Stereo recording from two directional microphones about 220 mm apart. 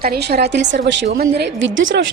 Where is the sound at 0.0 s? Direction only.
45° right (ahead or behind).